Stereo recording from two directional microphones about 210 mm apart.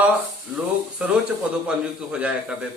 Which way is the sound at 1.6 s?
5° right (ahead or behind).